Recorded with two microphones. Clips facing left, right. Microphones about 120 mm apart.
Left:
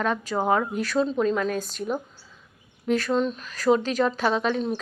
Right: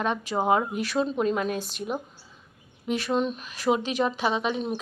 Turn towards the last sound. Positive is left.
turn(degrees=-15)  # may be behind; listen again after turning